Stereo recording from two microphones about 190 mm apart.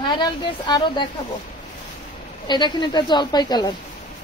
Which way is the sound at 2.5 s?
25° left (ahead or behind).